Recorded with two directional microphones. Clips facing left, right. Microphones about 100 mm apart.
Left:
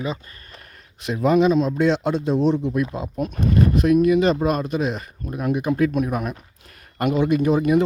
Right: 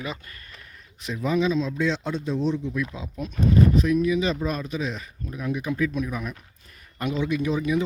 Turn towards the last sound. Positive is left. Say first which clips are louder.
# left 6 dB
turn(degrees=55)  # may be behind; listen again after turning